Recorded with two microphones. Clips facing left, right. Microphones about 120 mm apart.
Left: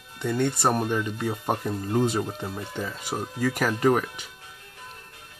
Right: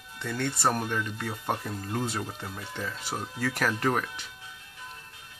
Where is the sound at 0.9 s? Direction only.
15° left (ahead or behind).